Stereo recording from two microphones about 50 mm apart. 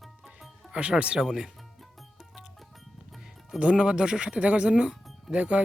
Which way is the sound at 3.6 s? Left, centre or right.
Centre.